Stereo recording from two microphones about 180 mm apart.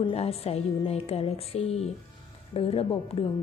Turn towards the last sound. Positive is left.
turn(degrees=30)  # may be behind; listen again after turning